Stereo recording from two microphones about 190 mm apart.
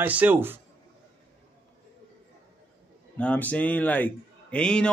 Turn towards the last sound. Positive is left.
turn(degrees=5)  # may be behind; listen again after turning